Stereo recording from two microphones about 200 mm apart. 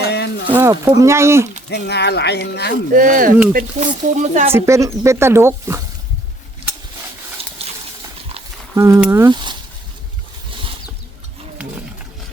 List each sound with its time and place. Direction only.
0.1 s a sound: 55° left (ahead or behind)
0.6 s speech: 20° right (ahead or behind)
1.7 s speech: 60° left (ahead or behind)
2.9 s speech: 40° right (ahead or behind)
4.5 s speech: 15° right (ahead or behind)
7.4 s water: 30° right (ahead or behind)
8.7 s speech: 15° right (ahead or behind)